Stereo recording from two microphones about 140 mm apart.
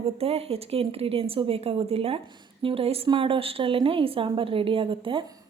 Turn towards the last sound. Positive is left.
turn(degrees=-40)  # may be behind; listen again after turning